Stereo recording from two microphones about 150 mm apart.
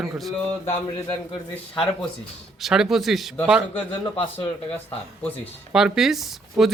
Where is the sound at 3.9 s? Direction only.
35° left (ahead or behind).